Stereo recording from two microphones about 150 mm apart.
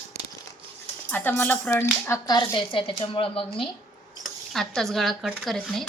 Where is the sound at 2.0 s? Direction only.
20° left (ahead or behind).